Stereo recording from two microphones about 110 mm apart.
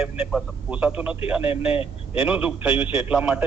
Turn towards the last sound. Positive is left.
turn(degrees=-10)  # may be behind; listen again after turning